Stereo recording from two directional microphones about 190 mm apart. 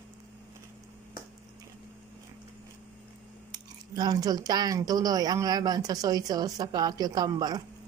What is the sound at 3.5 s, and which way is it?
Speech, 20° right (ahead or behind).